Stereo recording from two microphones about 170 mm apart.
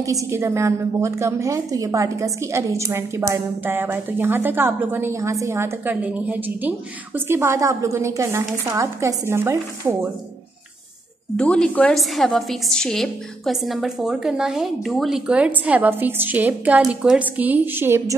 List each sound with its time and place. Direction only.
0.0 s a woman's voice: 20° right (ahead or behind)
11.3 s a woman's voice: 5° left (ahead or behind); by 18.1 s 15° right (ahead or behind)